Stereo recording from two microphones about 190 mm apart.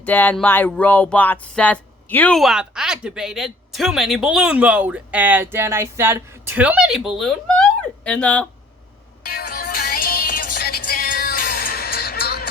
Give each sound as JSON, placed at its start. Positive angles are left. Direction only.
{"t": 0.0, "sound": "speech", "side_deg": 10}
{"t": 9.2, "sound": "music", "side_deg": 55}